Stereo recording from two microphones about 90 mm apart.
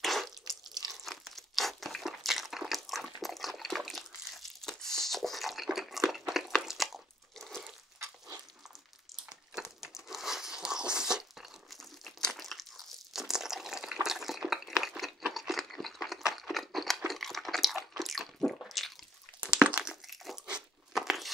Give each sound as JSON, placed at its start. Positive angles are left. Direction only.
{"t": 0.0, "sound": "drip", "side_deg": 0}
{"t": 0.7, "sound": "crunch", "side_deg": -45}
{"t": 0.9, "sound": "crunch", "side_deg": 0}
{"t": 9.5, "sound": "crumpling", "side_deg": -5}
{"t": 14.0, "sound": "crunch", "side_deg": -5}
{"t": 17.1, "sound": "a sound", "side_deg": 0}
{"t": 19.4, "sound": "crumpling", "side_deg": -15}
{"t": 20.4, "sound": "crunch", "side_deg": -5}